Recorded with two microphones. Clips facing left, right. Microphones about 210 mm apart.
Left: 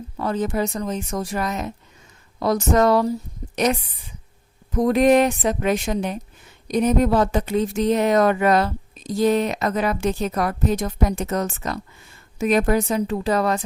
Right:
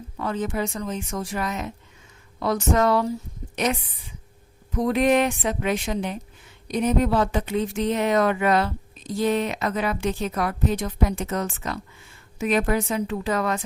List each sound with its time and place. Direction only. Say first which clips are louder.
0.2 s a woman's voice: left 3 dB; 40° left (ahead or behind)